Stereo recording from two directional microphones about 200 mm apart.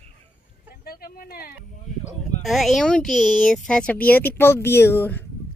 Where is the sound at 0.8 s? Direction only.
50° left (ahead or behind).